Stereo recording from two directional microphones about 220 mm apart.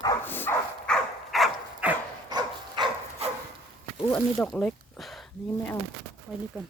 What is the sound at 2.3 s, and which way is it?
Dog, 20° right (ahead or behind).